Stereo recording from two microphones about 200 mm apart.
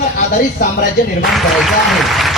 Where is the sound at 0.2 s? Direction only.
45° left (ahead or behind).